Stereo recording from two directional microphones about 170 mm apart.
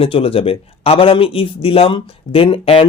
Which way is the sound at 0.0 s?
35° left (ahead or behind).